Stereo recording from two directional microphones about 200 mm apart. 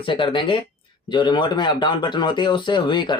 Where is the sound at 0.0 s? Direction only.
25° left (ahead or behind).